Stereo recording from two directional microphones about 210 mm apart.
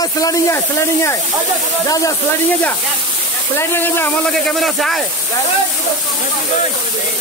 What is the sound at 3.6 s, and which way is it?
Speech, 10° left (ahead or behind).